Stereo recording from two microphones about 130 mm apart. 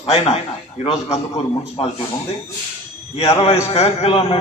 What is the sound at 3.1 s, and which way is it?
A man's voice, 50° left (ahead or behind).